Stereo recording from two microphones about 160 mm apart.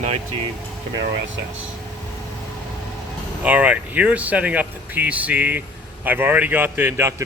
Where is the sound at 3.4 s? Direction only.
10° right (ahead or behind).